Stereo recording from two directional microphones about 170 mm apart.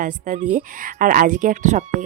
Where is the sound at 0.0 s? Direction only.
50° right (ahead or behind).